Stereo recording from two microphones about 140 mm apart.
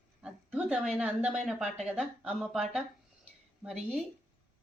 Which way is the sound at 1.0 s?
10° right (ahead or behind).